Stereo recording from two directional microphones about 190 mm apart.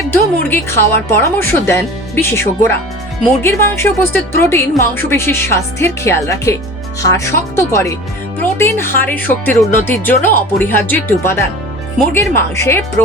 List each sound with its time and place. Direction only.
0.1 s speech: 10° left (ahead or behind)